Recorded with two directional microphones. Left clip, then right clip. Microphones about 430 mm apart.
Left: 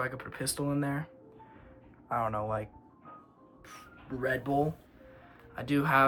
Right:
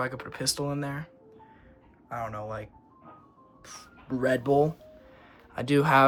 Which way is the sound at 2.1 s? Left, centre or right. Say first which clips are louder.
Left 3 dB; centre.